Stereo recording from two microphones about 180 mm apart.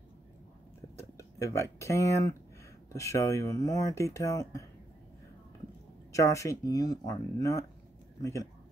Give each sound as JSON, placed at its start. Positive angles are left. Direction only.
{"t": 0.9, "sound": "speech", "side_deg": 15}
{"t": 6.1, "sound": "speech", "side_deg": 15}